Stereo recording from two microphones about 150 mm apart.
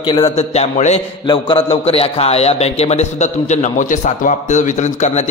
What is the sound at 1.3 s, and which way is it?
Mantra, 30° left (ahead or behind).